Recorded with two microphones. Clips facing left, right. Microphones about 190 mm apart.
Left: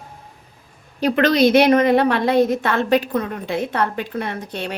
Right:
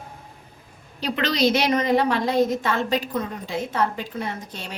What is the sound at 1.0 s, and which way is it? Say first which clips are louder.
A woman's voice: left 6 dB; 55° left (ahead or behind).